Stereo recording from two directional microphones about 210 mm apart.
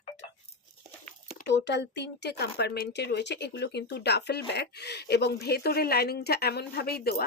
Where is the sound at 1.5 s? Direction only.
55° left (ahead or behind).